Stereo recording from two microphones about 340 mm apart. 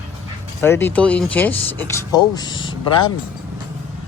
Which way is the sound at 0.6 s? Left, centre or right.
Centre.